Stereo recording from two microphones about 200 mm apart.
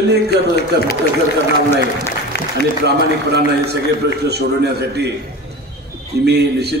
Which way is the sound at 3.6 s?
55° right (ahead or behind).